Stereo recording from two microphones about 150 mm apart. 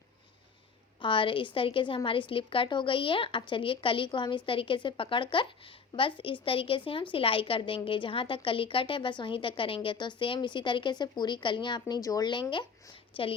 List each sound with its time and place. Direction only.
1.0 s a woman's voice: 35° left (ahead or behind)